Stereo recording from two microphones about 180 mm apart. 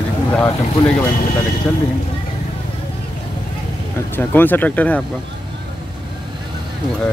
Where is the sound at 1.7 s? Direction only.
10° left (ahead or behind).